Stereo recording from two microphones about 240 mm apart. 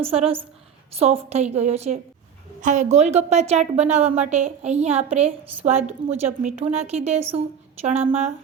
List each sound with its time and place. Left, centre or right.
0.0 s a woman's voice: right